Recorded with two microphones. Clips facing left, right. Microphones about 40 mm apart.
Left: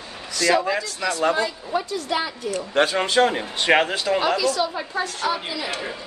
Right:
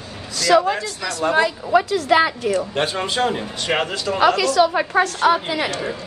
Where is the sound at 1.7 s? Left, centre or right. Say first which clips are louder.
Right 9 dB; right.